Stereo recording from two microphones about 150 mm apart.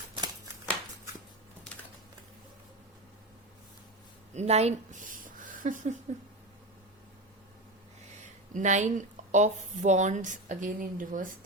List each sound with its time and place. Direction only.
4.4 s speech: 45° right (ahead or behind)
8.1 s speech: 50° right (ahead or behind)